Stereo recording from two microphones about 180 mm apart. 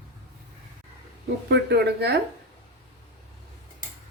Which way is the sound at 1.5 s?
70° right (ahead or behind).